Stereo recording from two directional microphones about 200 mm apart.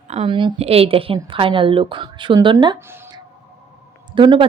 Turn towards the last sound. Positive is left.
turn(degrees=-25)  # may be behind; listen again after turning